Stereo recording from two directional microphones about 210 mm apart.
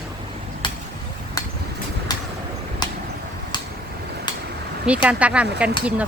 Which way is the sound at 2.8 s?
20° left (ahead or behind).